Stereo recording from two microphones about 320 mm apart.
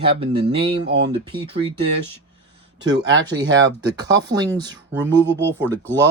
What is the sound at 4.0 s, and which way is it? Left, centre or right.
Speech, centre.